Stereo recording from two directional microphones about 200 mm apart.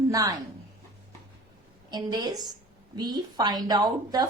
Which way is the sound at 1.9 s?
20° right (ahead or behind).